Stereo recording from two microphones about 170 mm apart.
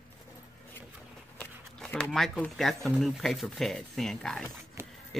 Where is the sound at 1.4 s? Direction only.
5° left (ahead or behind).